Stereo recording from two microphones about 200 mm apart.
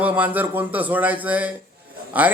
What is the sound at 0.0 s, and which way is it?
A man's voice, 10° right (ahead or behind).